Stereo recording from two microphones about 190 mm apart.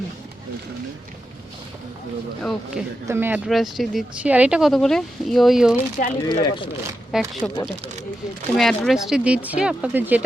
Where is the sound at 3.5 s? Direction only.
Centre (ahead or behind).